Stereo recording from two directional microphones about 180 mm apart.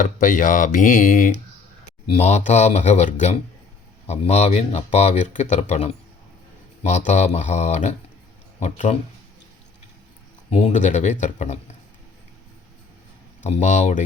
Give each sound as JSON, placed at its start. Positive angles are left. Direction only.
{"t": 0.0, "sound": "speech", "side_deg": 45}
{"t": 2.0, "sound": "speech", "side_deg": 35}
{"t": 10.5, "sound": "speech", "side_deg": 40}
{"t": 13.4, "sound": "speech", "side_deg": 40}